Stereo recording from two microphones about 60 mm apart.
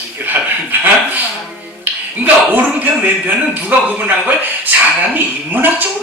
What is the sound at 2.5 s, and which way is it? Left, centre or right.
A man's voice, right.